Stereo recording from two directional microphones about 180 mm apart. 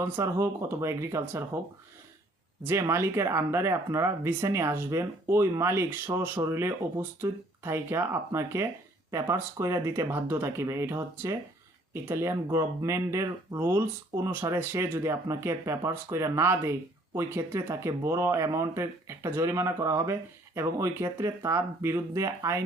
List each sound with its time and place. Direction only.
0.0 s speech: 15° right (ahead or behind)
2.6 s speech: 15° right (ahead or behind)